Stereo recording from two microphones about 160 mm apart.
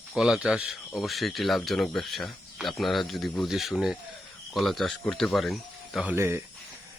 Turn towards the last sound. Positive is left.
turn(degrees=-15)  # may be behind; listen again after turning